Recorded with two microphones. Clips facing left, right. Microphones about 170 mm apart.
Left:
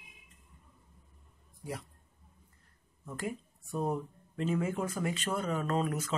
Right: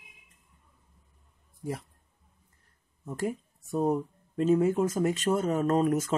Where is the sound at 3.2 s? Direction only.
40° right (ahead or behind).